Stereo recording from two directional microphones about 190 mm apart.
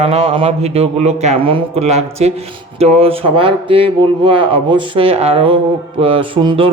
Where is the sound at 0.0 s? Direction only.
30° right (ahead or behind).